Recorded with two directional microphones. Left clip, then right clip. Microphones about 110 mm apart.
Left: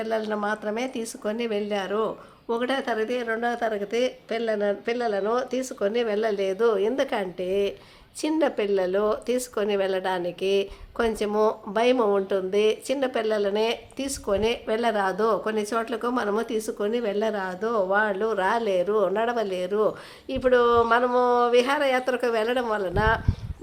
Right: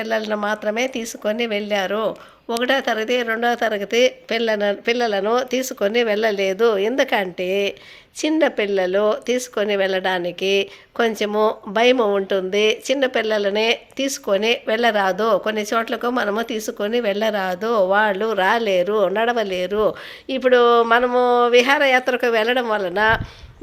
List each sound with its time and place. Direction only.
0.0 s speech: 35° right (ahead or behind)